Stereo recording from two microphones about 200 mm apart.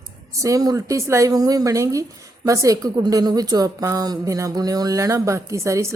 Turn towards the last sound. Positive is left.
turn(degrees=-15)  # may be behind; listen again after turning